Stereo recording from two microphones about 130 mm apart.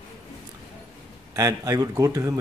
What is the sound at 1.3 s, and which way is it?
Speech, 25° right (ahead or behind).